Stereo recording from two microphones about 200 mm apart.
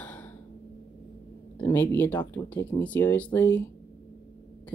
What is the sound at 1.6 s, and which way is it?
Speech, 10° left (ahead or behind).